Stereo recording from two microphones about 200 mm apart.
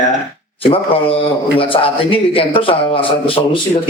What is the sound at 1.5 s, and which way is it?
A man's voice, 25° left (ahead or behind).